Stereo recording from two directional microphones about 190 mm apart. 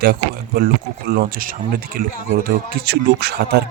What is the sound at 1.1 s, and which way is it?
Speech, 50° right (ahead or behind).